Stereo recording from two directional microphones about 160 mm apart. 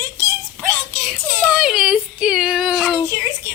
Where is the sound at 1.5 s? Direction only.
5° right (ahead or behind).